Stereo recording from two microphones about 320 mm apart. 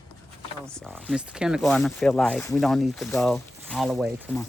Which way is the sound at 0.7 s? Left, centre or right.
Centre.